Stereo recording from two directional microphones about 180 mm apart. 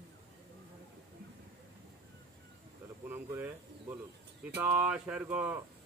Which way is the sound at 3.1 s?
10° right (ahead or behind).